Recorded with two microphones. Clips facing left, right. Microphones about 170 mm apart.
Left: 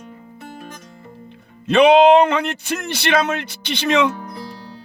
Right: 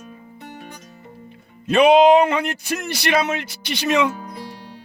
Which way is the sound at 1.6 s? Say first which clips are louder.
Left 1 dB; 10° right (ahead or behind).